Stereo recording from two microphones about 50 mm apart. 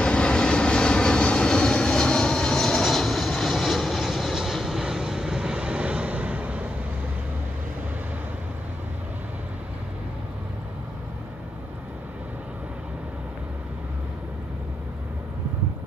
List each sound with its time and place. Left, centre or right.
0.0 s vehicle: centre; by 6.7 s right